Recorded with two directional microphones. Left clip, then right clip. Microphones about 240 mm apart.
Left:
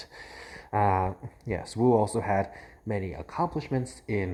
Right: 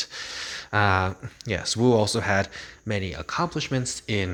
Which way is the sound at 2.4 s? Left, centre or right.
Right.